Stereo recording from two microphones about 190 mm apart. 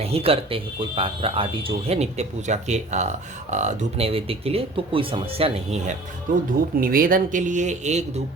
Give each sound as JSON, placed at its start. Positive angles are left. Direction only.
{"t": 0.0, "sound": "a man's voice", "side_deg": -30}